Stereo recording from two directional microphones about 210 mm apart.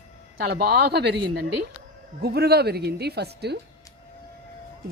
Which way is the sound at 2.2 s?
50° right (ahead or behind).